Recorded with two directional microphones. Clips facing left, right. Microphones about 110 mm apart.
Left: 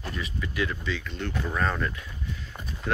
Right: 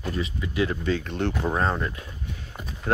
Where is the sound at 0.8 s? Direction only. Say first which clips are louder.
Right 7 dB; 50° right (ahead or behind).